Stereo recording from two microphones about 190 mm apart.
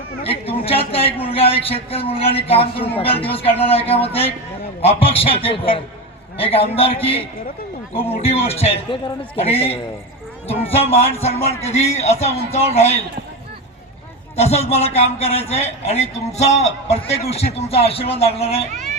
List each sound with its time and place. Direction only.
0.2 s a man's voice: 30° left (ahead or behind)
14.3 s a man's voice: 35° left (ahead or behind)